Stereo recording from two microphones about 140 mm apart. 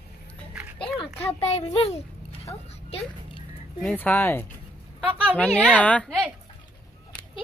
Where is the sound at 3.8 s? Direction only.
10° left (ahead or behind).